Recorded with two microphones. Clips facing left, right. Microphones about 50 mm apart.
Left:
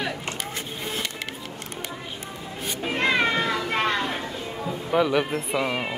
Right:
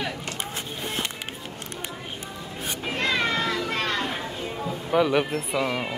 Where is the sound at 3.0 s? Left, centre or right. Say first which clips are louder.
Left 3 dB; left.